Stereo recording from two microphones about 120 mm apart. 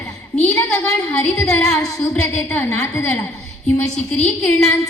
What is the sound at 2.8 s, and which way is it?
Speech, 25° left (ahead or behind).